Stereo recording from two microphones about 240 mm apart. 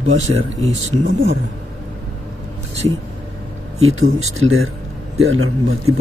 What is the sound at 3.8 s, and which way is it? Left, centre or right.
Speech, right.